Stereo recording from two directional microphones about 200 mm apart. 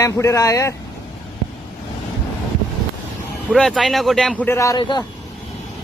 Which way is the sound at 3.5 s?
Centre (ahead or behind).